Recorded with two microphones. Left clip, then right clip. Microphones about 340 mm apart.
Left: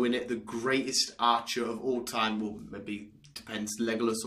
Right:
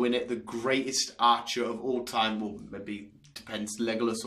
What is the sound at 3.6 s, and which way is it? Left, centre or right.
Speech, centre.